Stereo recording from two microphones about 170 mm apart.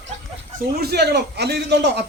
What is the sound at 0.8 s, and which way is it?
A man's voice, 75° right (ahead or behind).